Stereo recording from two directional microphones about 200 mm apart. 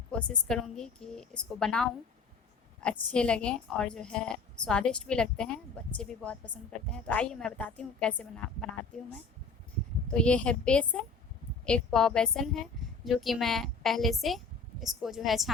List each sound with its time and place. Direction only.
0.1 s a woman's voice: 5° left (ahead or behind)
10.1 s a woman's voice: 5° left (ahead or behind)